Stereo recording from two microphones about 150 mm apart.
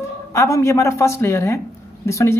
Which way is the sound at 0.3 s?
20° left (ahead or behind).